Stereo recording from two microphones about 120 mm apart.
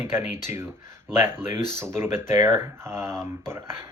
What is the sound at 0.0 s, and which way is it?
Speech, 20° right (ahead or behind).